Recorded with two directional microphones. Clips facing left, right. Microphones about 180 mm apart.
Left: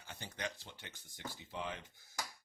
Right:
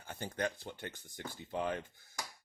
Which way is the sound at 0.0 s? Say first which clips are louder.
Right 7 dB; 50° right (ahead or behind).